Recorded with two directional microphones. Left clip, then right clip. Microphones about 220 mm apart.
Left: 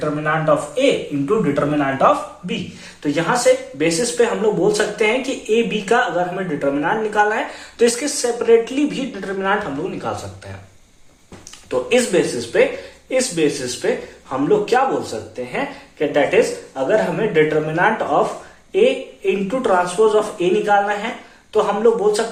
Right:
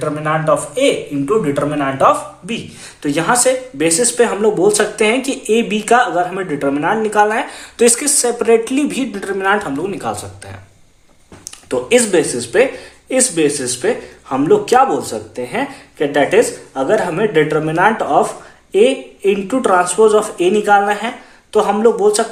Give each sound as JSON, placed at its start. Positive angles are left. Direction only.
{"t": 0.0, "sound": "speech", "side_deg": -45}
{"t": 11.7, "sound": "speech", "side_deg": -50}